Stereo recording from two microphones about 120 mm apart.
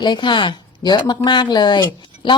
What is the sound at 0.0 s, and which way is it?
Speech, 40° left (ahead or behind).